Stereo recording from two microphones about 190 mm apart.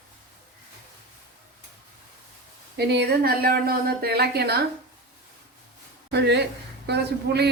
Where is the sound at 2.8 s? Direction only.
60° right (ahead or behind).